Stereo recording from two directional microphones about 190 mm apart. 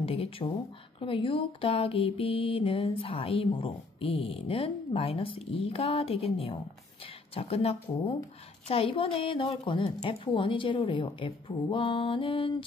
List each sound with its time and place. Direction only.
0.0 s speech: 30° left (ahead or behind)
0.9 s mantra: 30° left (ahead or behind)
7.3 s speech: 30° left (ahead or behind)
8.6 s mantra: 30° left (ahead or behind)